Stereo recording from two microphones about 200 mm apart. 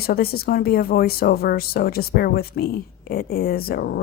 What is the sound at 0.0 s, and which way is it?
Speech, 50° left (ahead or behind).